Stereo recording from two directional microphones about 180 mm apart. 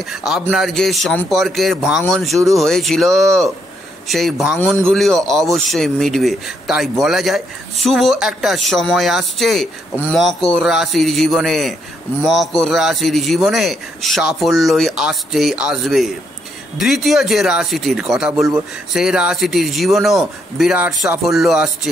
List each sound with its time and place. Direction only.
0.1 s speech: centre (ahead or behind)